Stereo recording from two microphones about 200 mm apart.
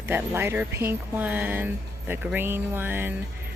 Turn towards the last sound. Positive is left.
turn(degrees=-10)  # may be behind; listen again after turning